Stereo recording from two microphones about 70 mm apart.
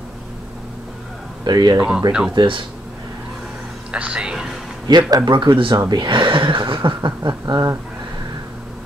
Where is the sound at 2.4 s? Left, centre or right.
Right.